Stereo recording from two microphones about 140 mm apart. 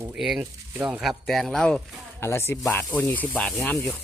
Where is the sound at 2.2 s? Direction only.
15° left (ahead or behind).